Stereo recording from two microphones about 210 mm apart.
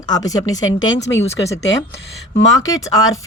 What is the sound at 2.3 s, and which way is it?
Speech, 60° left (ahead or behind).